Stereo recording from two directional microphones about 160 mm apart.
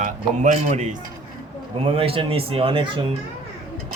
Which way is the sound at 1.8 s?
35° right (ahead or behind).